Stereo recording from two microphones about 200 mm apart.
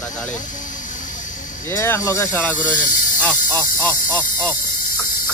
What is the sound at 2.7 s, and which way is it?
Snake, 40° left (ahead or behind).